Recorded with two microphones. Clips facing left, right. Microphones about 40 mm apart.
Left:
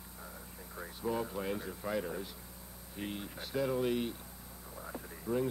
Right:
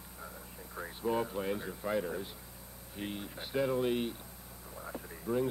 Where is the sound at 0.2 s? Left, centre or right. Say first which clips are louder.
Right 2 dB; centre.